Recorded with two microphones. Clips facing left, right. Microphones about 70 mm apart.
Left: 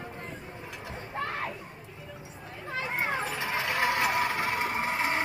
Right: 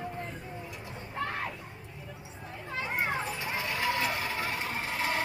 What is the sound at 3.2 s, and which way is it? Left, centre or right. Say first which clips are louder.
Cat: left 3 dB; left.